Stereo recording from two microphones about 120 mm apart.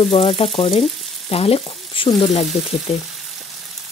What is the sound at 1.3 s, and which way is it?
Frying, 55° left (ahead or behind).